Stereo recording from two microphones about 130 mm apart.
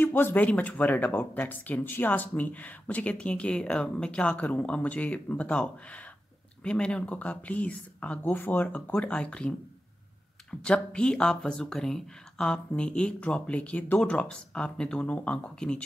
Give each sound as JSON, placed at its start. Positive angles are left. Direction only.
{"t": 0.0, "sound": "speech", "side_deg": 15}
{"t": 10.6, "sound": "speech", "side_deg": 10}